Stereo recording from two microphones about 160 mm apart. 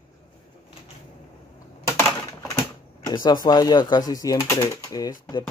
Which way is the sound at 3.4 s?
25° left (ahead or behind).